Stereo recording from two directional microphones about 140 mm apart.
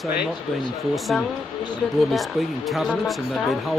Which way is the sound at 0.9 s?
Centre (ahead or behind).